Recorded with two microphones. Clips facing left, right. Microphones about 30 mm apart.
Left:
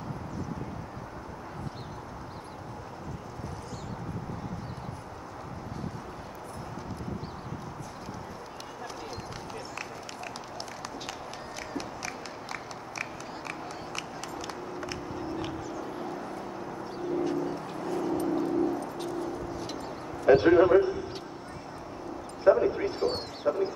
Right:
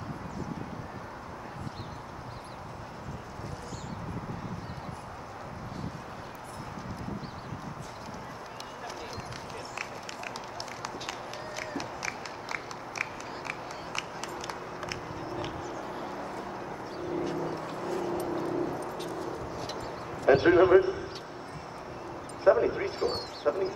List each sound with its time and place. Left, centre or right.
10.8 s run: centre
14.5 s biting: centre
16.9 s vehicle: centre
18.0 s dog: centre
19.5 s a sound: centre
20.5 s a man's voice: centre
22.4 s dog: centre